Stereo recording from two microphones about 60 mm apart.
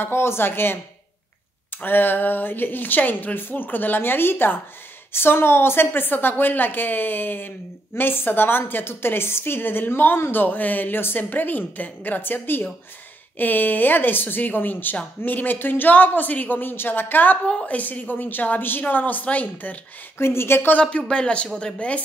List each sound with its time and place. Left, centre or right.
0.0 s a woman's voice: left
20.2 s a woman's voice: left
21.1 s a woman's voice: centre